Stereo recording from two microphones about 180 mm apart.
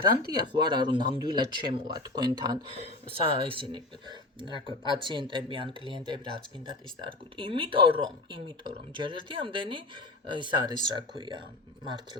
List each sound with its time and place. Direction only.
0.5 s speech: 25° right (ahead or behind)